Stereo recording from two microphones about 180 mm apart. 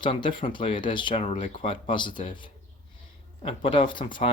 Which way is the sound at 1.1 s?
40° left (ahead or behind).